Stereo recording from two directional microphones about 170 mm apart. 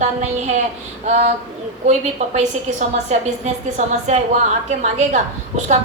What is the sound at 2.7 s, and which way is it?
A woman's voice, 45° right (ahead or behind).